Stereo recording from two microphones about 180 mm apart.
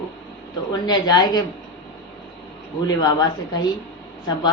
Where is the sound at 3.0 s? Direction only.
25° left (ahead or behind).